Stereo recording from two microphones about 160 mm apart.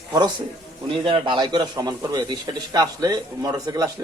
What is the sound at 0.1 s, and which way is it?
Speech, 30° right (ahead or behind).